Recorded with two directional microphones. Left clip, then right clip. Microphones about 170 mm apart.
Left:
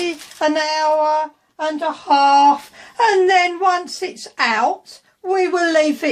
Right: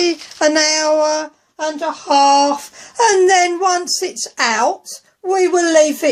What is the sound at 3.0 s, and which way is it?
A child's voice, 55° right (ahead or behind).